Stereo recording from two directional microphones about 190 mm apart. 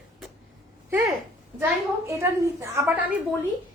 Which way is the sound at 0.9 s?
10° right (ahead or behind).